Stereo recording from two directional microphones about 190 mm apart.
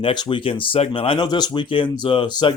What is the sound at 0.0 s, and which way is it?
Speech, 25° left (ahead or behind).